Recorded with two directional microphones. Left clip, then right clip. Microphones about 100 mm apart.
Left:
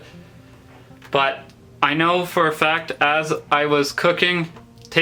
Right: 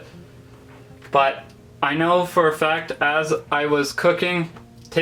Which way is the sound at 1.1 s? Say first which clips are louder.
Right 1 dB; 35° left (ahead or behind).